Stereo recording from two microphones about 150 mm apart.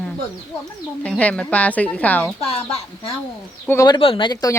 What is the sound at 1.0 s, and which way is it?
Speech, 10° left (ahead or behind).